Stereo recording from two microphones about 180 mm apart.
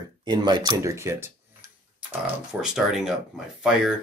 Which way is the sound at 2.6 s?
Centre (ahead or behind).